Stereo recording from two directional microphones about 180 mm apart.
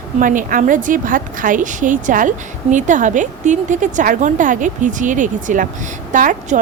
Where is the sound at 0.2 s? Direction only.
50° right (ahead or behind).